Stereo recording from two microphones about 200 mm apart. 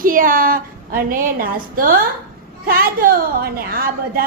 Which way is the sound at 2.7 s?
45° right (ahead or behind).